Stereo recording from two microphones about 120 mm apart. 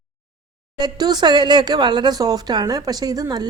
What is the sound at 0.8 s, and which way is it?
Speech, 35° right (ahead or behind).